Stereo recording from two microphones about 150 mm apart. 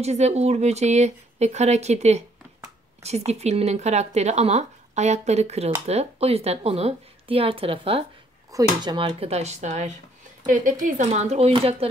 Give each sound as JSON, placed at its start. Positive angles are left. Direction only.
{"t": 0.0, "sound": "a woman's voice", "side_deg": -45}
{"t": 8.5, "sound": "speech", "side_deg": -25}
{"t": 10.4, "sound": "speech", "side_deg": -65}